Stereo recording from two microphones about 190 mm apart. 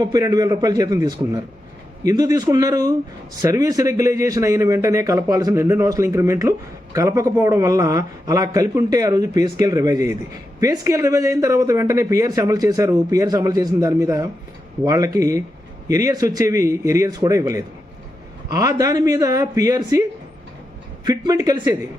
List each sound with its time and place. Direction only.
0.0 s a man's voice: 20° right (ahead or behind)